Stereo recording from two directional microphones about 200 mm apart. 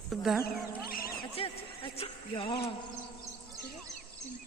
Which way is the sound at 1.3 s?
30° left (ahead or behind).